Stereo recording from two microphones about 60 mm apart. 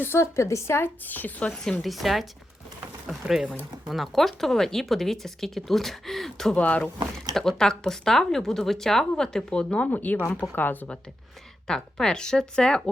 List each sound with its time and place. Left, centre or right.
0.0 s a woman's voice: left
1.0 s speech: left
1.8 s speech: centre
3.2 s speech: centre
6.5 s speech: left
7.3 s speech: centre; by 10.8 s left
11.7 s speech: centre